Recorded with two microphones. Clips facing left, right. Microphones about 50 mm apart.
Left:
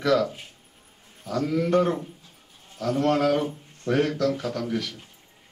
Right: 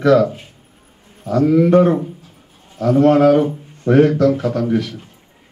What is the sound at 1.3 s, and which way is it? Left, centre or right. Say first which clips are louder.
A man's voice: right 11 dB; centre.